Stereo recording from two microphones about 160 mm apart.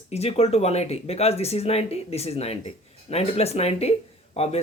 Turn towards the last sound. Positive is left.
turn(degrees=40)  # may be behind; listen again after turning